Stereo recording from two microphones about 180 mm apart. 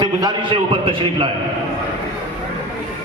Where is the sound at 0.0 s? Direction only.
25° right (ahead or behind).